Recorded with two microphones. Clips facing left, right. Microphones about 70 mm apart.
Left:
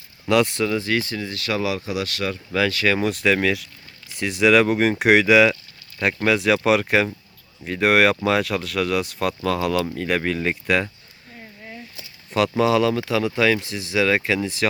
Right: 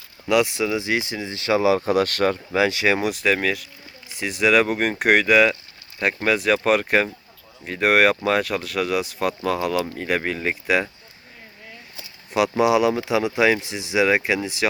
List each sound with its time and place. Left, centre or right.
0.3 s speech: centre; by 1.8 s right
1.8 s speech: right
2.5 s speech: centre
3.1 s speech: centre
11.9 s speech: centre